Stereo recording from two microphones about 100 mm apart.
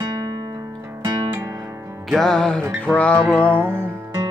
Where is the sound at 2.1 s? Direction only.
5° left (ahead or behind).